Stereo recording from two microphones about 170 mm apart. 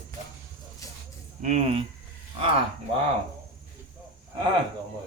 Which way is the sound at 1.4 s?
40° right (ahead or behind).